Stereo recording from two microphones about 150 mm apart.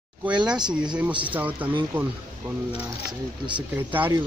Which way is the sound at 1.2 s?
10° right (ahead or behind).